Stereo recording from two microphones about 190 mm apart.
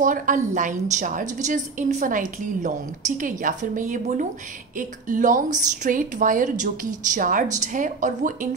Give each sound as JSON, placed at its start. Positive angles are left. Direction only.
{"t": 0.0, "sound": "a woman's voice", "side_deg": -45}